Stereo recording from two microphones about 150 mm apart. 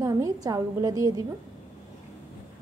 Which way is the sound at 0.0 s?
25° right (ahead or behind).